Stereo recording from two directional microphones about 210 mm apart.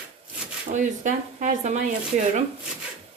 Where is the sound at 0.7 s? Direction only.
35° right (ahead or behind).